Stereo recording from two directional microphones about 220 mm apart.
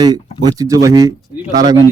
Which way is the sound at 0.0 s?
15° right (ahead or behind).